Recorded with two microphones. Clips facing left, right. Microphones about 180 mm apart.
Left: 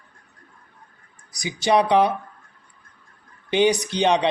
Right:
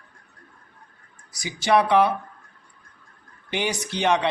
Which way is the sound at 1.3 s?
15° left (ahead or behind).